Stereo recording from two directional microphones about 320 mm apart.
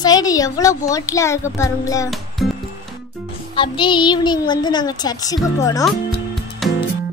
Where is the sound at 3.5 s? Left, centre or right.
Centre.